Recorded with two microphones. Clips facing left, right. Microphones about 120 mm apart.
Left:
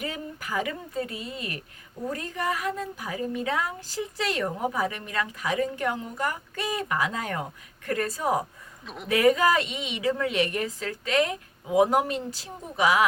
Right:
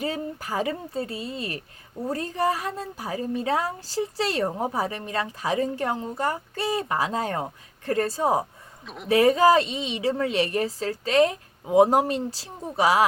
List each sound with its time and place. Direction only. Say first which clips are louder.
0.0 s a woman's voice: right 5 dB; 35° right (ahead or behind)
8.8 s speech: even; centre (ahead or behind)
9.0 s a woman's voice: right 3 dB; 30° right (ahead or behind)